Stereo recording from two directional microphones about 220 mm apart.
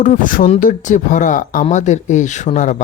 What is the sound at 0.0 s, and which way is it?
Speech, 35° left (ahead or behind).